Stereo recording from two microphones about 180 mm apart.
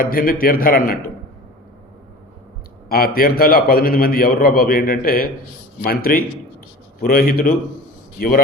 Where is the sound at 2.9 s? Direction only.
55° left (ahead or behind).